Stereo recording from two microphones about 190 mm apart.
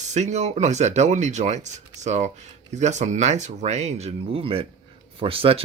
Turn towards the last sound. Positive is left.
turn(degrees=-30)  # may be behind; listen again after turning